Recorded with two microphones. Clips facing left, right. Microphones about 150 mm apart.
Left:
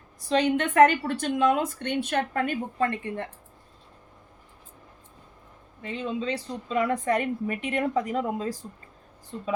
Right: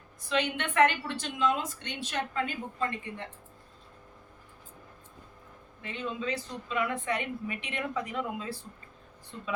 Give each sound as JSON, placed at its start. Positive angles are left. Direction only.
{"t": 0.2, "sound": "a woman's voice", "side_deg": 35}
{"t": 5.8, "sound": "a woman's voice", "side_deg": 35}